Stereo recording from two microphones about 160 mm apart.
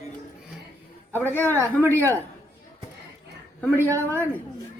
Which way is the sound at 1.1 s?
15° left (ahead or behind).